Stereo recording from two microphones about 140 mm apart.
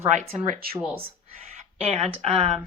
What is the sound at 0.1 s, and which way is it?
Speech, 65° right (ahead or behind).